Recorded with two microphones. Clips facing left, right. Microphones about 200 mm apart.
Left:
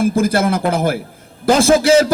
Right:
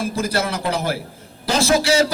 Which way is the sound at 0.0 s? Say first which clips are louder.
Left 7 dB; 50° left (ahead or behind).